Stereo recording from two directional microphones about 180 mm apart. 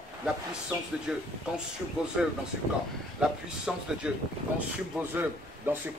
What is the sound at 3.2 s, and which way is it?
A man's voice, 5° right (ahead or behind).